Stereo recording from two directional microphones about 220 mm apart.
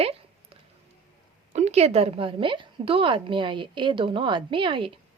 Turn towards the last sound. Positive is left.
turn(degrees=-25)  # may be behind; listen again after turning